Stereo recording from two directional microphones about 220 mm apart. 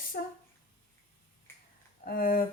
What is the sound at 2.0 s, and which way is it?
Speech, 40° left (ahead or behind).